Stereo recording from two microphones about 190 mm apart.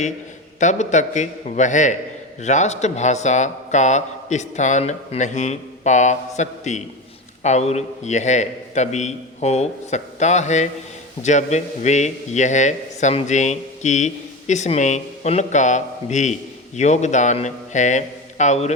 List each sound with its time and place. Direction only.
0.6 s a man's voice: 40° left (ahead or behind)